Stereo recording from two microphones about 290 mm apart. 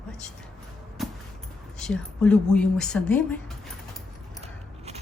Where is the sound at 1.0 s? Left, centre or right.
Centre.